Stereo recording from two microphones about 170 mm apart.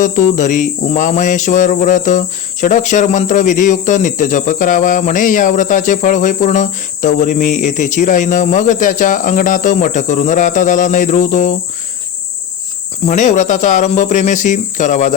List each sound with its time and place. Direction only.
0.0 s cricket: 50° left (ahead or behind)
13.1 s cricket: 45° left (ahead or behind)